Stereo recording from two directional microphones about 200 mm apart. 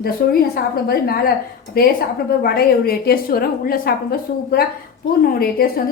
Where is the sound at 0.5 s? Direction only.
50° left (ahead or behind).